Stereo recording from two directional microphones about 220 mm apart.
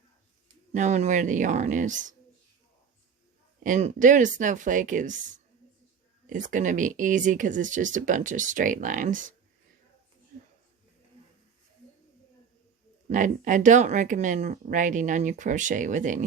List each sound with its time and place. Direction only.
0.7 s speech: 30° right (ahead or behind)
3.6 s speech: 35° right (ahead or behind)
13.1 s speech: 35° right (ahead or behind)